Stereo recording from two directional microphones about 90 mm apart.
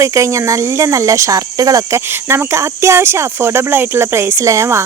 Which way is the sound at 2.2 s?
30° right (ahead or behind).